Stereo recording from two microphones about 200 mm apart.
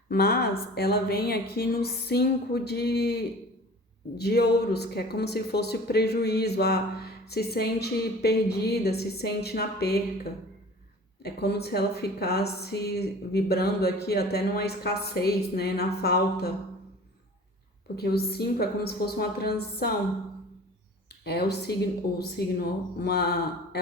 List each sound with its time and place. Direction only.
0.1 s speech: 50° left (ahead or behind)
4.2 s speech: 55° left (ahead or behind)
11.2 s speech: 50° left (ahead or behind)
17.9 s speech: 50° left (ahead or behind)
21.1 s speech: 55° left (ahead or behind)